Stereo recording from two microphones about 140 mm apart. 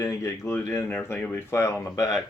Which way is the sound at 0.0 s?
20° left (ahead or behind).